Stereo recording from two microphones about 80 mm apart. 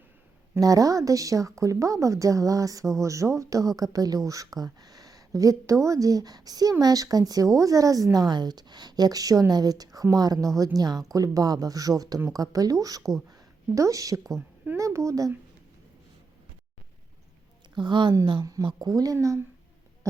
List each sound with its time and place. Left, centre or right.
0.6 s a woman's voice: right
17.7 s speech: right
18.6 s a woman's voice: right
19.1 s speech: right